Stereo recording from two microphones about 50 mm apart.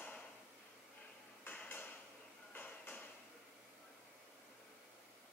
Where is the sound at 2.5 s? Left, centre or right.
Left.